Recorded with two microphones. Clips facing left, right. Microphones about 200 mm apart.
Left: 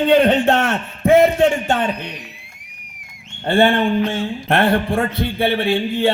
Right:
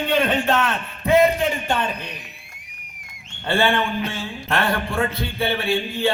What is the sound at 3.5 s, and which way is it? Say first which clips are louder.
Speech: left 5 dB; 55° left (ahead or behind).